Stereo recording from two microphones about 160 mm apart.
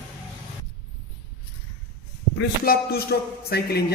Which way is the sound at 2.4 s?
75° left (ahead or behind).